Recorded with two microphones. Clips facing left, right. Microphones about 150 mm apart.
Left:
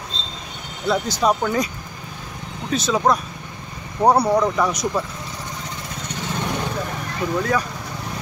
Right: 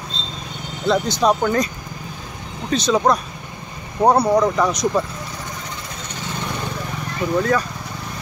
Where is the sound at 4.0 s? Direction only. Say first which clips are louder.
Right 1 dB; 10° right (ahead or behind).